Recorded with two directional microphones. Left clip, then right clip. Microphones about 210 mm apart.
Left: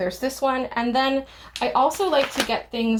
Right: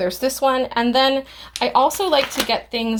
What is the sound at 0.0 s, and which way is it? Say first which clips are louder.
A woman's voice: right 5 dB; 35° right (ahead or behind).